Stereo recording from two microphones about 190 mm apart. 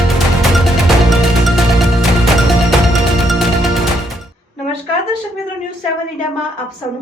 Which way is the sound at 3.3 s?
Centre (ahead or behind).